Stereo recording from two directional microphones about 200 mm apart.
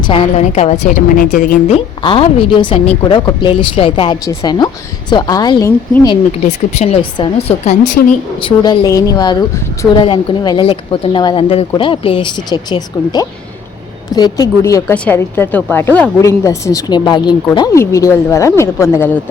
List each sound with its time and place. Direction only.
0.1 s a woman's voice: 30° left (ahead or behind)
2.0 s a woman's voice: 25° left (ahead or behind)
6.4 s a woman's voice: 35° left (ahead or behind); by 19.2 s 10° left (ahead or behind)